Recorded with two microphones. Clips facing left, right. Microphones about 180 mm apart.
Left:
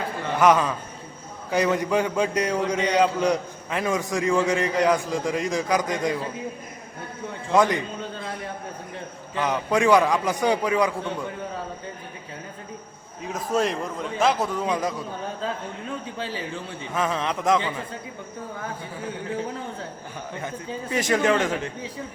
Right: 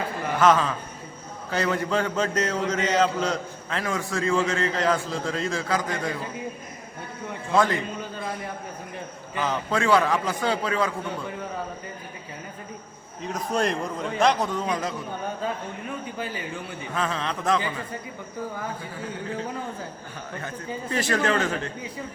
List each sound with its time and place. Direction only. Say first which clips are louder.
0.3 s a man's voice: left 1 dB; 15° left (ahead or behind)
7.5 s a man's voice: left 2 dB; 15° left (ahead or behind)
9.5 s a man's voice: left 3 dB; 15° left (ahead or behind)
13.2 s a man's voice: left 1 dB; 5° left (ahead or behind)
16.1 s speech: left 1 dB; 30° left (ahead or behind)
16.9 s a man's voice: left 3 dB; 15° left (ahead or behind)
20.9 s a man's voice: left 3 dB; 15° left (ahead or behind)